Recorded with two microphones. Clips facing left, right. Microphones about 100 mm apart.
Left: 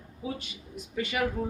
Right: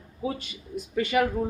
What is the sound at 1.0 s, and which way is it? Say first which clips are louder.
Speech: right 6 dB; 50° right (ahead or behind).